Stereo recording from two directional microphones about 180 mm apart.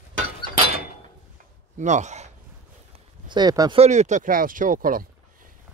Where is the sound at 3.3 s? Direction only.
25° right (ahead or behind).